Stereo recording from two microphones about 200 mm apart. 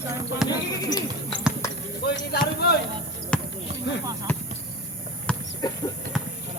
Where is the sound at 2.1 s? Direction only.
55° left (ahead or behind).